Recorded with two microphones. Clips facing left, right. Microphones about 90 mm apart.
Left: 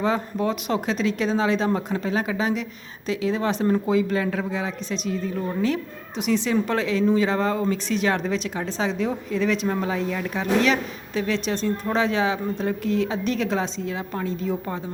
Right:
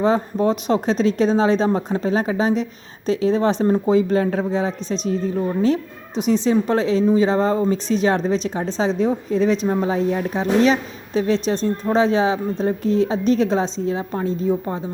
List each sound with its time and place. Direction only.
0.0 s speech: 30° right (ahead or behind)